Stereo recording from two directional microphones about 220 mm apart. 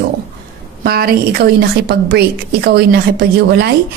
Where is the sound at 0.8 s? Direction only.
45° right (ahead or behind).